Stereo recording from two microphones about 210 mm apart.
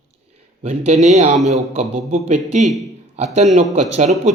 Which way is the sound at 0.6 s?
30° right (ahead or behind).